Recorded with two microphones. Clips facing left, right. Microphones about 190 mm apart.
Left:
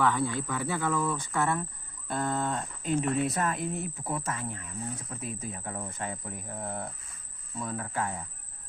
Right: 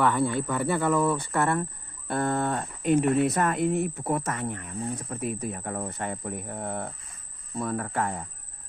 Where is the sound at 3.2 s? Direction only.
70° right (ahead or behind).